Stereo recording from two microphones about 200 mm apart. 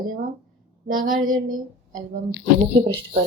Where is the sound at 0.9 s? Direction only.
45° right (ahead or behind).